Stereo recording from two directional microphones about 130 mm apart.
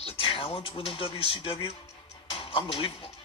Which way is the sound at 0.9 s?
45° left (ahead or behind).